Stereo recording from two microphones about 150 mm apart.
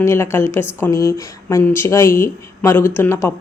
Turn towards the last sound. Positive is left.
turn(degrees=15)  # may be behind; listen again after turning